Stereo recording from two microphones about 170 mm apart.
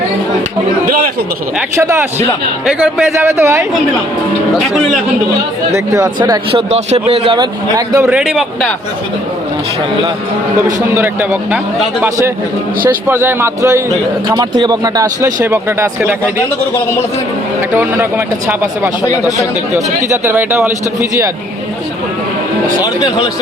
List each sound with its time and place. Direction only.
1.7 s a man's voice: 15° right (ahead or behind)
5.7 s a man's voice: 20° right (ahead or behind); by 7.3 s 35° right (ahead or behind)
7.3 s speech: 20° right (ahead or behind)
8.0 s a man's voice: 5° right (ahead or behind)
10.7 s a man's voice: 15° right (ahead or behind)
13.1 s a man's voice: 15° right (ahead or behind)
14.3 s speech: 25° right (ahead or behind)
17.7 s a man's voice: 10° right (ahead or behind)
20.1 s a man's voice: 10° right (ahead or behind)
23.0 s speech: 25° left (ahead or behind)